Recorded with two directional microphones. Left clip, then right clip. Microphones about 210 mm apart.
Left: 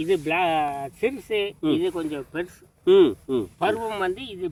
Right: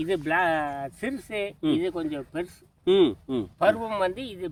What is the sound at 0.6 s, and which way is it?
A man's voice, 15° right (ahead or behind).